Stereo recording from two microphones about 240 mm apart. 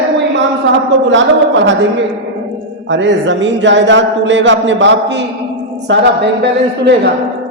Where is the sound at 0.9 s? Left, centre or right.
Right.